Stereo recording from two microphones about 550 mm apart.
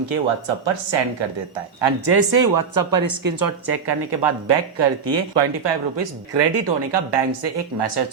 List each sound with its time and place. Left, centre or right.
0.0 s speech: right
1.8 s a woman's voice: right